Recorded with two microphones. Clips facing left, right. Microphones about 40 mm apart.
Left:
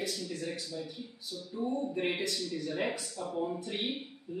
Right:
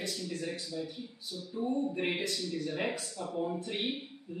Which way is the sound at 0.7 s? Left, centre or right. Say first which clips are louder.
Right 2 dB; centre.